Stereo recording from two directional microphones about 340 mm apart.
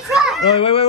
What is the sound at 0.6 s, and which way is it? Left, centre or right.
Speech, centre.